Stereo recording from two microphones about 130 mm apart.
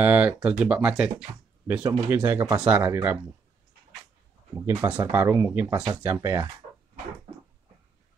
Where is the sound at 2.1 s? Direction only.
15° right (ahead or behind).